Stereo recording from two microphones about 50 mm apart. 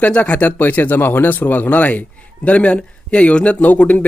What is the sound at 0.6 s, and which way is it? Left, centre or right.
Speech, left.